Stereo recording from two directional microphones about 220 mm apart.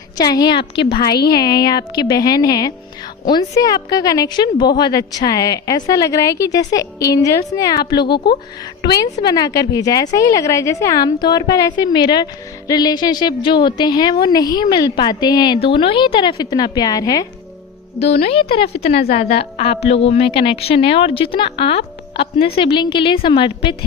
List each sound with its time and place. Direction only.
0.2 s a woman's voice: 20° left (ahead or behind)
0.6 s a woman's voice: 50° left (ahead or behind)
1.3 s a woman's voice: 15° left (ahead or behind)
8.1 s a woman's voice: 45° left (ahead or behind)
8.8 s a woman's voice: 20° left (ahead or behind)
18.0 s a woman's voice: 30° left (ahead or behind)